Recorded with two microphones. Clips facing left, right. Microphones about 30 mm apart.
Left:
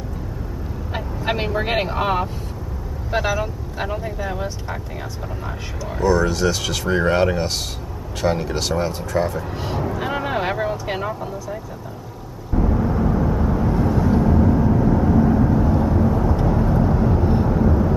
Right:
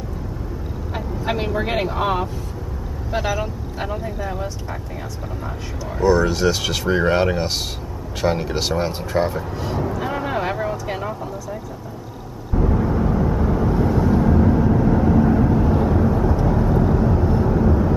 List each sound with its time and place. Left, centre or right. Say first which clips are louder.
0.9 s speech: even; left
3.2 s speech: left 1 dB; centre
3.9 s speech: even; centre
6.0 s speech: right 1 dB; centre
9.9 s vehicle: even; centre
12.5 s vehicle: even; centre